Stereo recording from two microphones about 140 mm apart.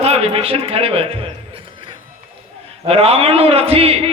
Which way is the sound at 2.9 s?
45° right (ahead or behind).